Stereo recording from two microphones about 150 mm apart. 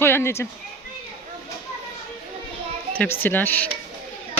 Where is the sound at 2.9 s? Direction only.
15° left (ahead or behind).